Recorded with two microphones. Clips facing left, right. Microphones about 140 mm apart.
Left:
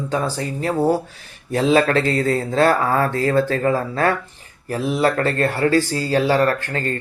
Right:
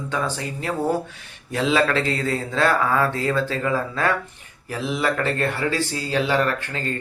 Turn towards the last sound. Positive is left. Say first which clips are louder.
# left 4 dB
turn(degrees=40)  # may be behind; listen again after turning